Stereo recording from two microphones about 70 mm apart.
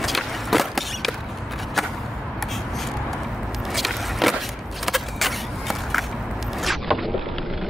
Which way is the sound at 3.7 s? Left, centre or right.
Centre.